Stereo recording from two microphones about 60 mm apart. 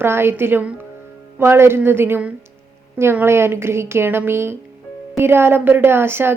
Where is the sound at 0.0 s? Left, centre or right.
Right.